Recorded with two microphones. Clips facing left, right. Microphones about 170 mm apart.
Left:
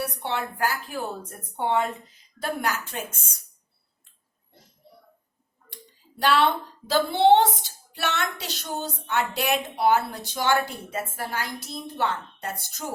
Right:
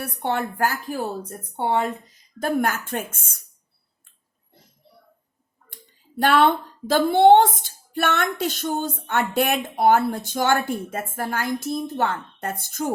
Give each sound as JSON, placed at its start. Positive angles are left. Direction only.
{"t": 0.0, "sound": "speech", "side_deg": -50}
{"t": 2.4, "sound": "speech", "side_deg": -50}
{"t": 5.7, "sound": "speech", "side_deg": -50}